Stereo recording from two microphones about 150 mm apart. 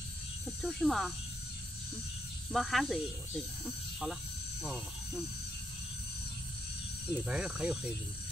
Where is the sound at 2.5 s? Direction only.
Centre (ahead or behind).